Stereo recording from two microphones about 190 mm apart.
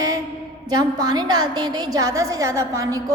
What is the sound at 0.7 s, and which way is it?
A woman's voice, 20° right (ahead or behind).